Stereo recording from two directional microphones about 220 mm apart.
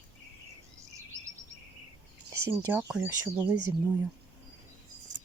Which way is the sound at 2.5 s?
15° right (ahead or behind).